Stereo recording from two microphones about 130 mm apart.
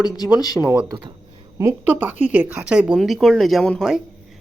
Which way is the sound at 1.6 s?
25° right (ahead or behind).